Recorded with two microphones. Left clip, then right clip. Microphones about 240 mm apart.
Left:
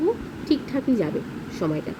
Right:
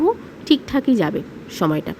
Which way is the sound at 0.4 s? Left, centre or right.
Right.